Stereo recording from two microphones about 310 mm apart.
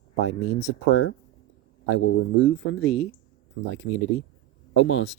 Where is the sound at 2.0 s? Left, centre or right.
Left.